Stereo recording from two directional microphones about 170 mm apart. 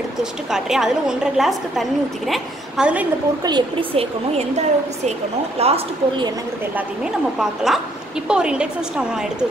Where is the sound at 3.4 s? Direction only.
25° right (ahead or behind).